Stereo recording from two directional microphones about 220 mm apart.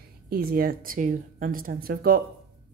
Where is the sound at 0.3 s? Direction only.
40° right (ahead or behind).